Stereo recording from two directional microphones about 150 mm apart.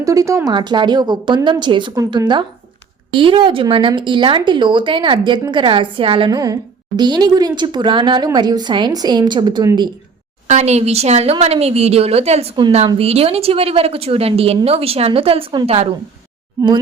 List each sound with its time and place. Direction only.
0.0 s a woman's voice: 20° right (ahead or behind)
0.5 s a woman's voice: 30° right (ahead or behind)
10.4 s a woman's voice: 50° right (ahead or behind)
16.6 s a woman's voice: 30° right (ahead or behind)